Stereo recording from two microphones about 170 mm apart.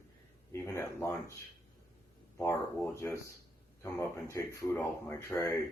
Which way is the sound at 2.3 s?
10° left (ahead or behind).